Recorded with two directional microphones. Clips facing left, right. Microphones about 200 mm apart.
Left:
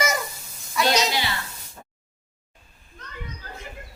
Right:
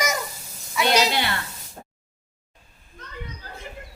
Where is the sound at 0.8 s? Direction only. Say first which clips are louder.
Right 2 dB; 60° right (ahead or behind).